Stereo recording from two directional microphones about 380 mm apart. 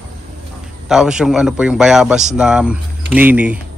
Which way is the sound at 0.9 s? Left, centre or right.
Centre.